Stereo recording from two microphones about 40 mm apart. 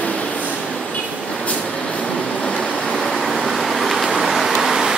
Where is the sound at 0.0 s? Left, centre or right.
Left.